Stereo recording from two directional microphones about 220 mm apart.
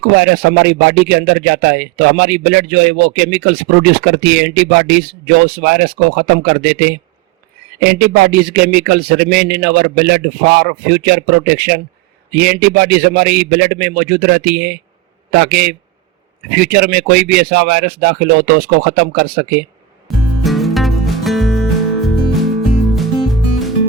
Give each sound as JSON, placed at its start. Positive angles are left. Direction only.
{"t": 0.2, "sound": "speech", "side_deg": -45}
{"t": 20.4, "sound": "music", "side_deg": 0}